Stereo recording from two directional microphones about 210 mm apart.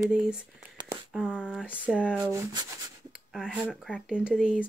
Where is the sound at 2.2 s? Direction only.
15° right (ahead or behind).